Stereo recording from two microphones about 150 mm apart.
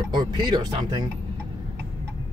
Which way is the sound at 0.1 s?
30° right (ahead or behind).